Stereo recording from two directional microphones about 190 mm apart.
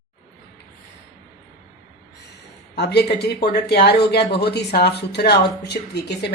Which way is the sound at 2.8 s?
60° left (ahead or behind).